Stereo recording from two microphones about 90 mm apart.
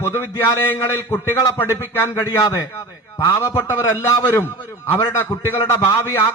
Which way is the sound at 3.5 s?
30° left (ahead or behind).